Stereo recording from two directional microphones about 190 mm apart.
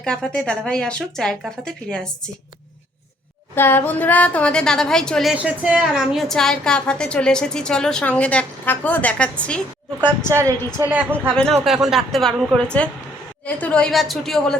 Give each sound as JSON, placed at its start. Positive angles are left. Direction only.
{"t": 0.0, "sound": "a woman's voice", "side_deg": 5}
{"t": 3.5, "sound": "a woman's voice", "side_deg": 10}
{"t": 10.3, "sound": "a woman's voice", "side_deg": 40}
{"t": 10.8, "sound": "a woman's voice", "side_deg": -10}